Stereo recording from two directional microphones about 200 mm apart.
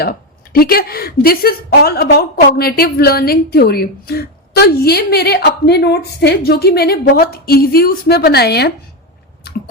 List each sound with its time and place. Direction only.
0.5 s a woman's voice: 50° left (ahead or behind)